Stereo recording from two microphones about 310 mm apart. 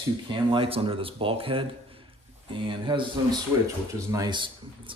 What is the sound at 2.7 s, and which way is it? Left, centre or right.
Speech, centre.